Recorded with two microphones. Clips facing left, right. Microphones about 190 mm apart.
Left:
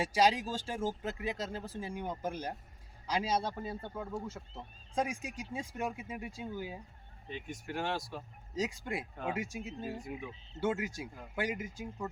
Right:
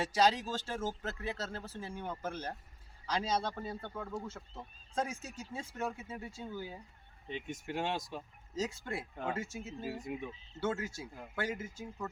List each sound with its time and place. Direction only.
0.0 s speech: 10° left (ahead or behind)
7.3 s speech: 20° right (ahead or behind)
8.5 s speech: 15° left (ahead or behind)
10.1 s speech: 20° right (ahead or behind)
10.6 s speech: 15° left (ahead or behind)